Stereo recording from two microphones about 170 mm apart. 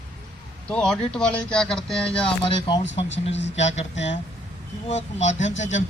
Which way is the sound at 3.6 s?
40° left (ahead or behind).